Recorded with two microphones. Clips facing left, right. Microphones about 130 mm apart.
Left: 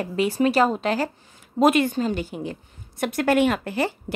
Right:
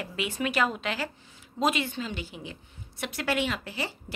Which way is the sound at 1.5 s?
55° left (ahead or behind).